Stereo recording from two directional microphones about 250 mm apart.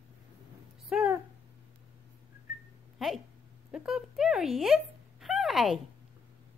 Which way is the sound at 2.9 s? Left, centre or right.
Centre.